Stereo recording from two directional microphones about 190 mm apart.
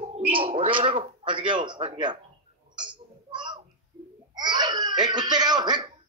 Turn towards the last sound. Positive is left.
turn(degrees=-20)  # may be behind; listen again after turning